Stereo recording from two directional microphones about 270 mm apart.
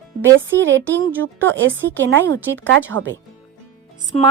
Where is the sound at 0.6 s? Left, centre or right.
Right.